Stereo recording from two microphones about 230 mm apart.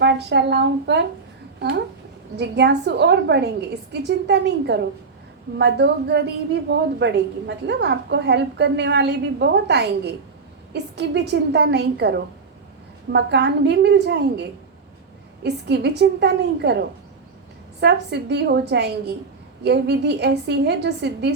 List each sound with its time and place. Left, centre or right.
0.0 s a woman's voice: right
2.3 s a woman's voice: right
13.1 s a woman's voice: right
15.4 s a woman's voice: right
17.7 s a woman's voice: right